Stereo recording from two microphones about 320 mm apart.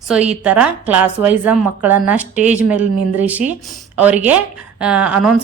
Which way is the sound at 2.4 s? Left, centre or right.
Left.